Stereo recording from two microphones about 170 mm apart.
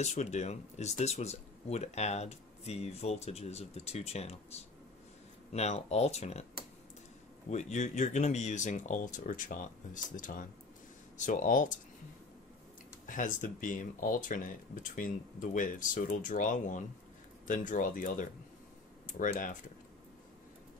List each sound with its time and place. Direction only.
0.0 s speech: 40° left (ahead or behind)
7.4 s speech: 45° left (ahead or behind)
13.0 s speech: 50° left (ahead or behind)